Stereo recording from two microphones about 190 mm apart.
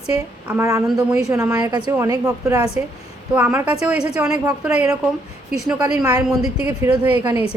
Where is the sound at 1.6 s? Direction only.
20° right (ahead or behind); by 4.3 s 5° right (ahead or behind).